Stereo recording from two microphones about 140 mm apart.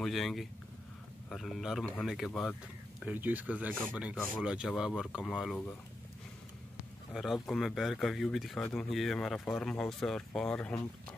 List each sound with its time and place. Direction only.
0.0 s speech: centre (ahead or behind)
3.1 s speech: 10° right (ahead or behind)
7.2 s speech: centre (ahead or behind)